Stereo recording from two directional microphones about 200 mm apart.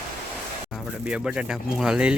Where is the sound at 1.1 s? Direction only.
5° right (ahead or behind).